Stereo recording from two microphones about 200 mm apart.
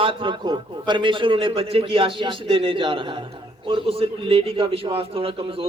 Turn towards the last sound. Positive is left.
turn(degrees=-30)  # may be behind; listen again after turning